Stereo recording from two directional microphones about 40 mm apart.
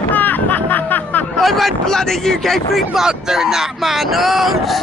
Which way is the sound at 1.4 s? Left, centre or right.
Centre.